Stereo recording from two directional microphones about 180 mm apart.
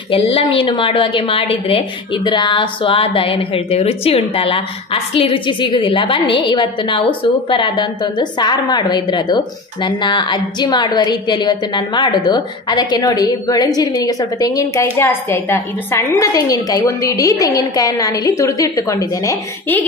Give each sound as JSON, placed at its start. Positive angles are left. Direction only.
{"t": 0.1, "sound": "a woman's voice", "side_deg": 30}